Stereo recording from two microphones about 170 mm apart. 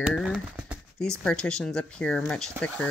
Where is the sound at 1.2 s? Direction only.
5° left (ahead or behind).